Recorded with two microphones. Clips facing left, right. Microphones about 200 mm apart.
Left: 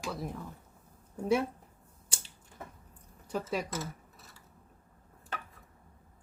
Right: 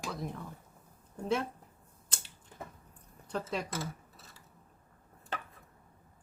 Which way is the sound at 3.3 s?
10° left (ahead or behind).